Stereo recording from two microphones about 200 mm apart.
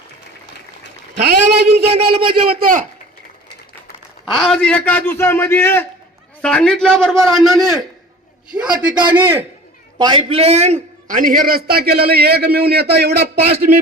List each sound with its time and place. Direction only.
1.5 s a sound: 55° right (ahead or behind)
2.3 s a man's voice: 45° right (ahead or behind)
4.3 s a man's voice: centre (ahead or behind)
10.0 s a man's voice: 25° right (ahead or behind); by 13.7 s 50° right (ahead or behind)